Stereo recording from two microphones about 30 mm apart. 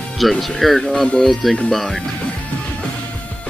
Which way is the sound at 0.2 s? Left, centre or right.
Centre.